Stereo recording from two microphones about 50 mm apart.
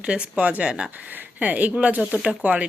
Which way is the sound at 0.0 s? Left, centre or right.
Right.